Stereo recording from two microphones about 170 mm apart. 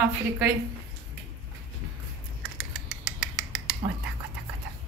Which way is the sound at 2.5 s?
Centre (ahead or behind).